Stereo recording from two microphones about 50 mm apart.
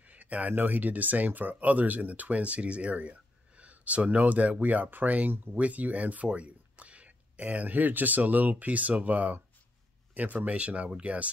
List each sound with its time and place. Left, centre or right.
0.0 s speech: right